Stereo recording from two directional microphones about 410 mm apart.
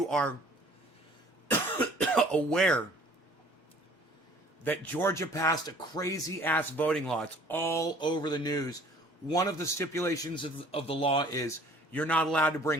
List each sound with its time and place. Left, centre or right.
0.0 s speech: centre
2.0 s speech: centre
4.6 s speech: centre